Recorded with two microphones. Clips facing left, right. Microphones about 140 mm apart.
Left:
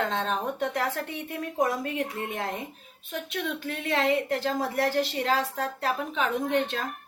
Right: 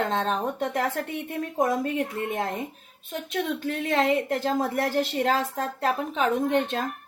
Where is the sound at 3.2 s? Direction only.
45° right (ahead or behind).